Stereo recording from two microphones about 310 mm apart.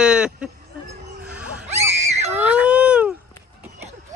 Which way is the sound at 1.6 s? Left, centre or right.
Right.